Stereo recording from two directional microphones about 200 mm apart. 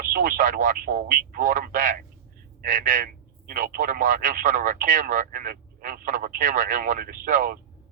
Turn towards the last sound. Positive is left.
turn(degrees=-40)  # may be behind; listen again after turning